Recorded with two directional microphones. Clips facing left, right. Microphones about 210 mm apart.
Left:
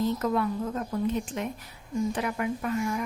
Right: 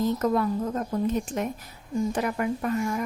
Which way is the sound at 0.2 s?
40° right (ahead or behind).